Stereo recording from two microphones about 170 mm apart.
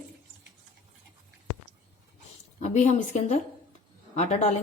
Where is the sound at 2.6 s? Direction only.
45° left (ahead or behind).